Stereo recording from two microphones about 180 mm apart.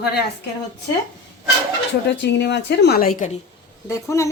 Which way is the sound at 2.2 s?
70° left (ahead or behind).